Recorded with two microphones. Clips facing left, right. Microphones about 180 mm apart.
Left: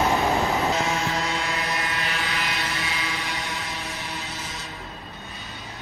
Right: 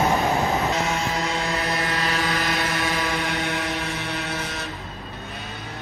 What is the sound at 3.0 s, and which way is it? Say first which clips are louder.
Vehicle: right 6 dB; 60° right (ahead or behind).